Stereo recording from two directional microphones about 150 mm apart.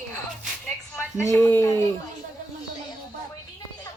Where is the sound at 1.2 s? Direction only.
20° left (ahead or behind).